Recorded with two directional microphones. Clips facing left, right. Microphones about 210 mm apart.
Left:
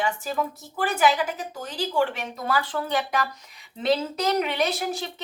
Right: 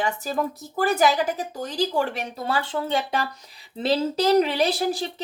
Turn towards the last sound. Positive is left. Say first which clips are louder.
# right 3 dB
turn(degrees=-35)  # may be behind; listen again after turning